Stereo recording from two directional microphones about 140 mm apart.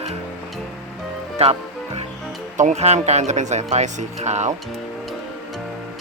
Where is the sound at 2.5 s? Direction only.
60° right (ahead or behind).